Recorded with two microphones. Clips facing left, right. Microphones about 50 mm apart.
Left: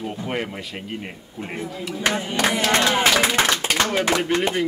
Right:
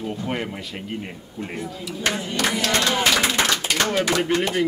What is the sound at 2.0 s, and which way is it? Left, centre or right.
Speech, left.